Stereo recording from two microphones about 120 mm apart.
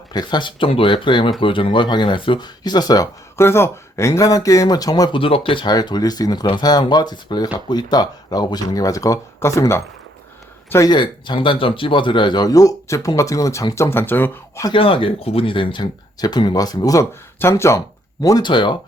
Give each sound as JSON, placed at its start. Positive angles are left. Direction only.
{"t": 0.1, "sound": "speech", "side_deg": 35}
{"t": 3.3, "sound": "speech", "side_deg": 20}
{"t": 10.8, "sound": "speech", "side_deg": 40}
{"t": 14.7, "sound": "speech", "side_deg": 50}